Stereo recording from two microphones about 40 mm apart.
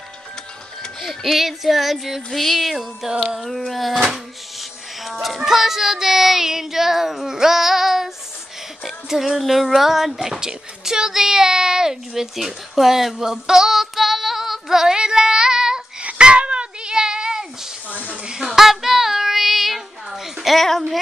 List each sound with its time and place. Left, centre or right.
1.0 s child singing: centre
3.4 s child singing: centre
4.6 s speech: centre
8.8 s a sound: centre
9.4 s child singing: centre
9.7 s speech: centre
16.0 s a sound: right
18.3 s child singing: centre
20.5 s child singing: centre